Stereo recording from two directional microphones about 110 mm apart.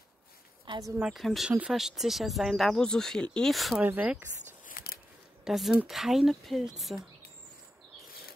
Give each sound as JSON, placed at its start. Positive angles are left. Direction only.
{"t": 0.7, "sound": "speech", "side_deg": -50}
{"t": 1.0, "sound": "speech", "side_deg": 0}
{"t": 3.8, "sound": "speech", "side_deg": -15}
{"t": 5.4, "sound": "speech", "side_deg": -5}